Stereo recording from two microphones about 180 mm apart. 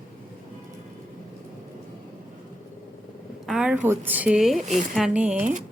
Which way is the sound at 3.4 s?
5° right (ahead or behind).